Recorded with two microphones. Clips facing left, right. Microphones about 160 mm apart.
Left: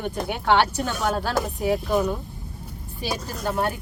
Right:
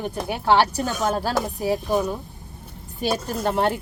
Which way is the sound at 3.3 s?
30° right (ahead or behind).